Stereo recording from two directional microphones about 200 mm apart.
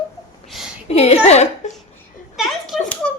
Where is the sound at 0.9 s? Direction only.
30° left (ahead or behind).